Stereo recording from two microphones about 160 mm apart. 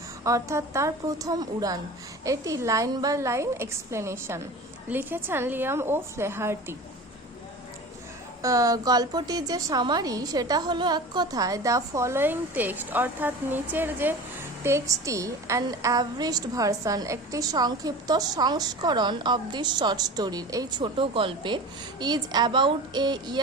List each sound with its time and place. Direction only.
0.3 s a woman's voice: 20° right (ahead or behind)
8.4 s a woman's voice: 20° right (ahead or behind)